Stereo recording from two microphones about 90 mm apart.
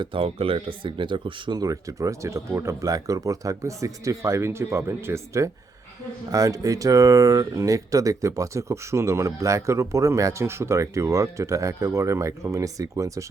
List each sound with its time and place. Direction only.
0.0 s speech: 80° right; by 1.6 s 60° right (ahead or behind)
1.6 s speech: 40° right (ahead or behind)